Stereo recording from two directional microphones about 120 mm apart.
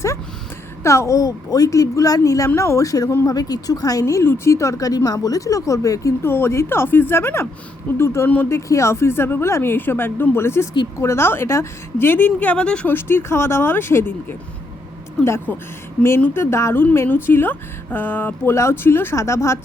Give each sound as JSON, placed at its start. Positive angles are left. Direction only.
{"t": 0.8, "sound": "speech", "side_deg": 25}